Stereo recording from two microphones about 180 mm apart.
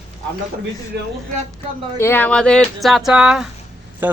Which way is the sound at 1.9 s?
10° left (ahead or behind).